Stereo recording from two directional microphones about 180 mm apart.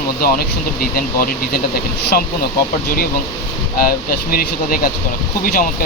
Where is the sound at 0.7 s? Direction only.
55° left (ahead or behind).